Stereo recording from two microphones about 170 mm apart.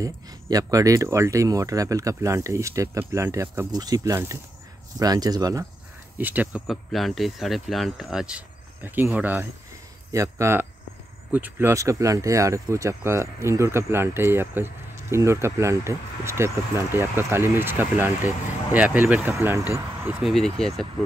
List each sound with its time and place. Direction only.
0.0 s speech: 20° right (ahead or behind)
6.1 s speech: 10° right (ahead or behind)